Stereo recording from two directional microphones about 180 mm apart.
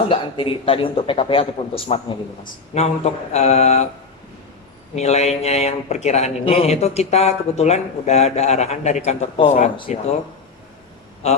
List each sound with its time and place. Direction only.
0.1 s a man's voice: 30° left (ahead or behind)
4.9 s speech: 35° left (ahead or behind)
11.2 s speech: 35° left (ahead or behind)